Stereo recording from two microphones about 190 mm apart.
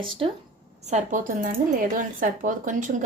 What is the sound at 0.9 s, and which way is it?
Speech, 40° right (ahead or behind).